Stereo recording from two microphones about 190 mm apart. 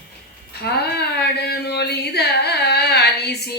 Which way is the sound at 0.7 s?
60° left (ahead or behind).